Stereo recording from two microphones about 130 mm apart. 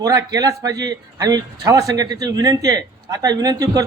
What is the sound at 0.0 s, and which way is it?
A man's voice, 30° right (ahead or behind).